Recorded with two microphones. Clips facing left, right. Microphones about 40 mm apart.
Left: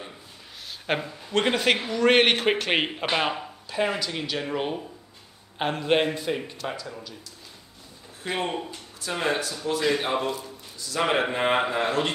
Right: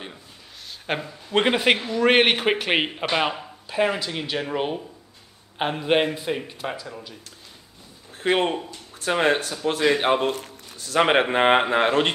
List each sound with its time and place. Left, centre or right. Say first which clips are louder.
0.8 s speech: even; centre
1.3 s a man's voice: right 3 dB; centre
5.6 s speech: right 2 dB; centre
8.2 s a man's voice: right 7 dB; right